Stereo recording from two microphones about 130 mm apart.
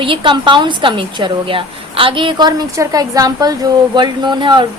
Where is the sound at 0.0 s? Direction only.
40° right (ahead or behind).